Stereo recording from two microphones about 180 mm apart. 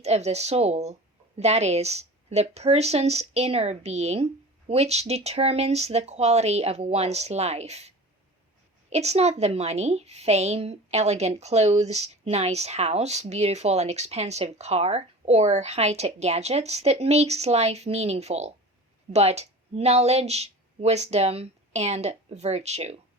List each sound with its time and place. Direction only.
0.0 s a woman's voice: 35° right (ahead or behind)